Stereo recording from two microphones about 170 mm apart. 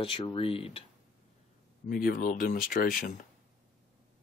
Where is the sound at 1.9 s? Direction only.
55° left (ahead or behind).